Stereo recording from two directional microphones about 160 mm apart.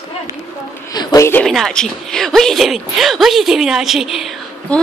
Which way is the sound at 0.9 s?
25° left (ahead or behind).